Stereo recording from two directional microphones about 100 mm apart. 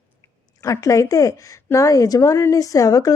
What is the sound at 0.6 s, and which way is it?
A woman's voice, 30° left (ahead or behind).